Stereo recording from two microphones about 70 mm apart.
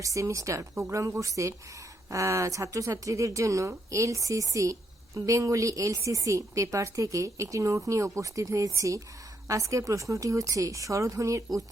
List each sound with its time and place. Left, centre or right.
0.0 s speech: right